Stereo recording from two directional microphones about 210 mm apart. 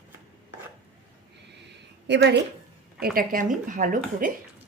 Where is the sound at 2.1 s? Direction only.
55° right (ahead or behind).